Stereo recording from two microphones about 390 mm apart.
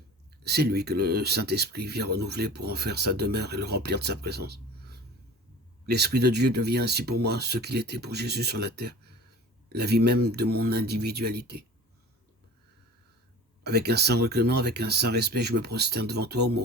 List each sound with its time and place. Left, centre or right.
0.4 s speech: right
13.7 s speech: right